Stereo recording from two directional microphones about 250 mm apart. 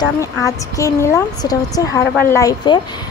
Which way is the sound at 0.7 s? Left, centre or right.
Centre.